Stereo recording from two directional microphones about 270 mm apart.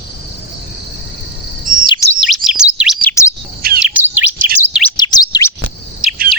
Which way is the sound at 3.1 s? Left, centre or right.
Centre.